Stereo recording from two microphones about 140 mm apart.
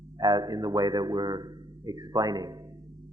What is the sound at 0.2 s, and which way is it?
A man's voice, 30° right (ahead or behind).